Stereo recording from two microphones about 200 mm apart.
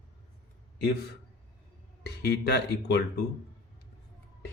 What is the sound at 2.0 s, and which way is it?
Speech, 55° left (ahead or behind).